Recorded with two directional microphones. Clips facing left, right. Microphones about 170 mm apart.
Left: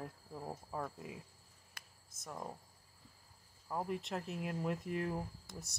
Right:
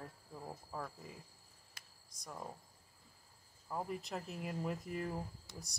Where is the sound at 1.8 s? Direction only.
55° left (ahead or behind).